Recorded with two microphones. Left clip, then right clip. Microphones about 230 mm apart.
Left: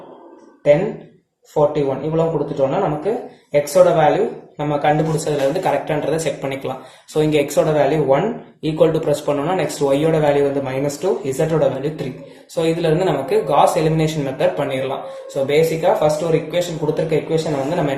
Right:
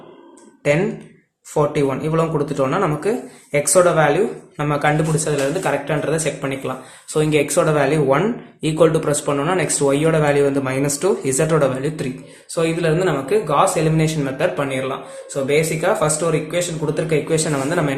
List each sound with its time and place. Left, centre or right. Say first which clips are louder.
1.7 s speech: even; right